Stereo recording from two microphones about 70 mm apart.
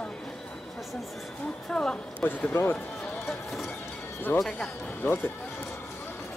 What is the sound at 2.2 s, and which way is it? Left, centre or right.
Speech, left.